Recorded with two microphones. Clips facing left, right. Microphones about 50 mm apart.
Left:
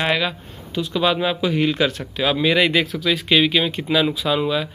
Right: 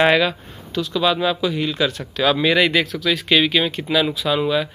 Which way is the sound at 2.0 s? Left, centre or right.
Centre.